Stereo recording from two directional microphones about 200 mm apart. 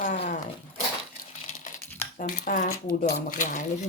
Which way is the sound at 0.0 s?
35° left (ahead or behind).